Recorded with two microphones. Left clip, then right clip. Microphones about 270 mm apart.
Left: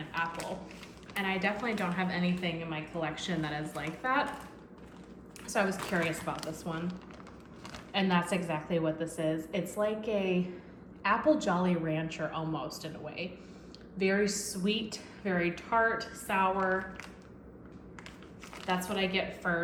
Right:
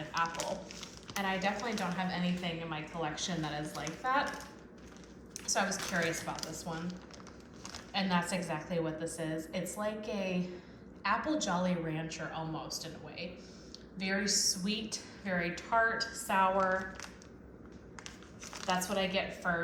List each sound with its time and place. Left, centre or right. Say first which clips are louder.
0.8 s a woman's voice: left 1 dB; centre
5.5 s a woman's voice: left 2 dB; centre
18.8 s a woman's voice: left 2 dB; centre